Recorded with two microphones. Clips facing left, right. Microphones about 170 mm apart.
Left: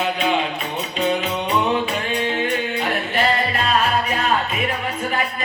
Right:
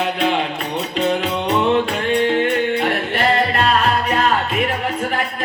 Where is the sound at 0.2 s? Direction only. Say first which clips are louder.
Right 3 dB; 60° right (ahead or behind).